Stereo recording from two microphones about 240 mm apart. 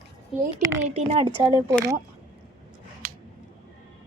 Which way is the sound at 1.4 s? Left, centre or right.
Centre.